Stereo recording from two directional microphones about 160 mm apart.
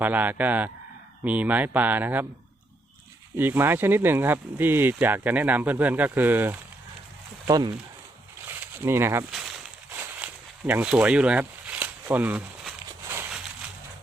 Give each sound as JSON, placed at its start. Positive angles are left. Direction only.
{"t": 0.0, "sound": "speech", "side_deg": -10}
{"t": 3.3, "sound": "speech", "side_deg": -15}
{"t": 7.4, "sound": "speech", "side_deg": -25}
{"t": 8.4, "sound": "a sound", "side_deg": -15}
{"t": 10.7, "sound": "speech", "side_deg": -10}